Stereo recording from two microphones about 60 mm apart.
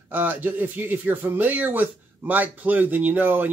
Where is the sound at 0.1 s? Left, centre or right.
Right.